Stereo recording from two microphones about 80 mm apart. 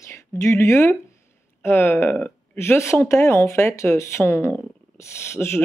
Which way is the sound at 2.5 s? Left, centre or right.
Left.